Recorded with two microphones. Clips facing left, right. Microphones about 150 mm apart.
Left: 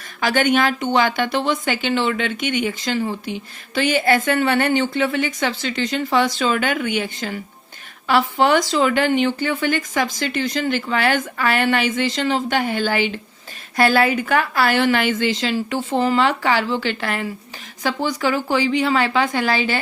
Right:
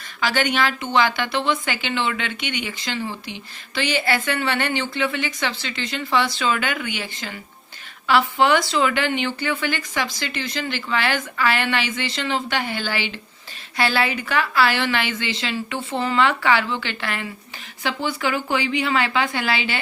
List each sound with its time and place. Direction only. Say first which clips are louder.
0.2 s speech: left 4 dB; 45° left (ahead or behind)